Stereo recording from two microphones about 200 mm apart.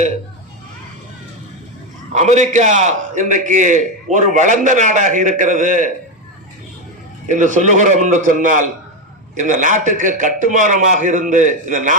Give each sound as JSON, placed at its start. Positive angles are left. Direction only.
{"t": 2.1, "sound": "a man's voice", "side_deg": -35}
{"t": 7.3, "sound": "a man's voice", "side_deg": -40}